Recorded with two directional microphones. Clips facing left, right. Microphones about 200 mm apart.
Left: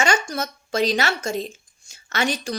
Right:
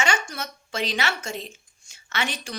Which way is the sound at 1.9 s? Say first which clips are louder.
Left 6 dB; 40° left (ahead or behind).